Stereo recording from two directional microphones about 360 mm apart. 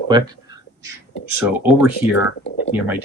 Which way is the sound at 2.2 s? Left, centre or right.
Left.